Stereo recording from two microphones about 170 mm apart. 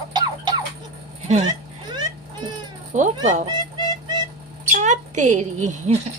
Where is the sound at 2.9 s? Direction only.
45° right (ahead or behind).